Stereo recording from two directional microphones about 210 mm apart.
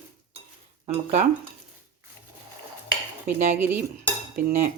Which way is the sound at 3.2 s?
10° right (ahead or behind).